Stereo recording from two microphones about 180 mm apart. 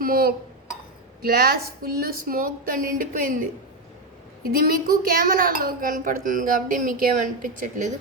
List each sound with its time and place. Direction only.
0.0 s dishes: 55° right (ahead or behind)
1.2 s speech: 60° right (ahead or behind)